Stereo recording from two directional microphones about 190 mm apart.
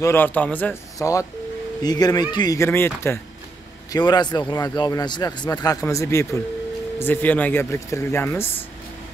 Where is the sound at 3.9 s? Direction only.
20° left (ahead or behind).